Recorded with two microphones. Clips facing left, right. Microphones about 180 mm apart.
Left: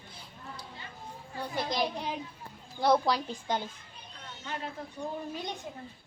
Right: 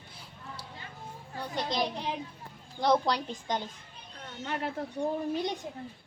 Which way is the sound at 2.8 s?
5° left (ahead or behind).